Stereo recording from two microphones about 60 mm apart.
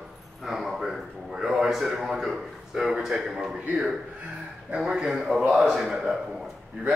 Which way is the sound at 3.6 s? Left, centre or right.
Right.